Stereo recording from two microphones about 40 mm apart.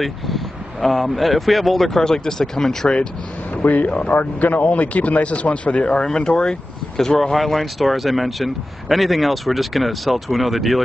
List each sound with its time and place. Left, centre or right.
0.0 s a man's voice: centre
3.6 s speech: left; by 6.5 s centre
7.3 s a man's voice: centre